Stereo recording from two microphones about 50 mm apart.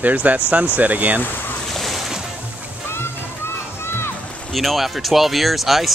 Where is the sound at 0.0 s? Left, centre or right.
Right.